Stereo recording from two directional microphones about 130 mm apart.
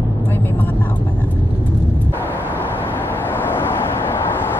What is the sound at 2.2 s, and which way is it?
Vehicle, 15° left (ahead or behind).